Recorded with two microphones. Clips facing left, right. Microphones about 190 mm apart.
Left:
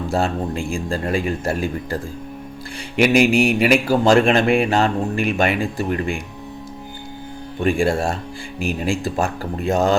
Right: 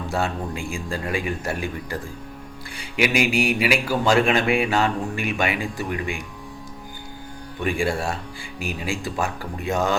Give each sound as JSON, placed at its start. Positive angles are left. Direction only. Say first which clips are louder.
{"t": 0.1, "sound": "a man's voice", "louder": "left 4 dB", "side_deg": 40}
{"t": 3.0, "sound": "speech", "louder": "left 6 dB", "side_deg": 45}
{"t": 7.6, "sound": "speech", "louder": "left 5 dB", "side_deg": 45}